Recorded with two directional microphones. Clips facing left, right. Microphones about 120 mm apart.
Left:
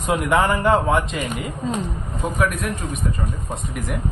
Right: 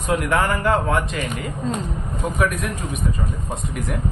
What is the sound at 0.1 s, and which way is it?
A man's voice, 20° left (ahead or behind).